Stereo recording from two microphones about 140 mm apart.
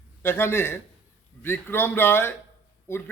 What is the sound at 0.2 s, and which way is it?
Speech, 15° left (ahead or behind).